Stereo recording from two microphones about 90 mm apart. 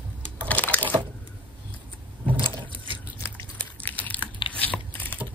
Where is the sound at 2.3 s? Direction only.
70° right (ahead or behind).